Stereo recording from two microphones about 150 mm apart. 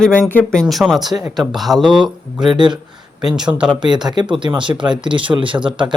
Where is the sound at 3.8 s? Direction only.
30° right (ahead or behind).